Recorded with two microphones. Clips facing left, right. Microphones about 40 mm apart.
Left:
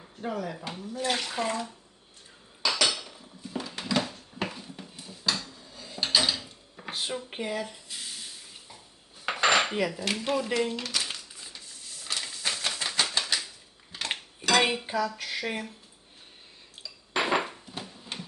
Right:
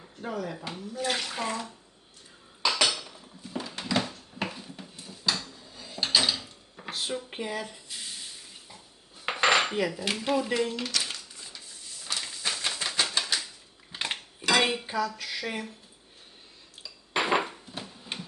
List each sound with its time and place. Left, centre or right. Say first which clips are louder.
0.0 s speech: left 1 dB; centre
2.8 s dishes: even; centre
7.1 s speech: even; centre
7.5 s spray: left 1 dB; centre
9.2 s cutlery: even; centre
10.0 s speech: right 1 dB; centre
10.9 s a sound: even; centre
13.9 s dishes: right 2 dB; right
14.6 s dishes: left 1 dB; centre
15.0 s speech: left 1 dB; centre
16.8 s dishes: even; centre